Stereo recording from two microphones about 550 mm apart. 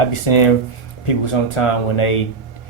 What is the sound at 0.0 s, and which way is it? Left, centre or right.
Speech, left.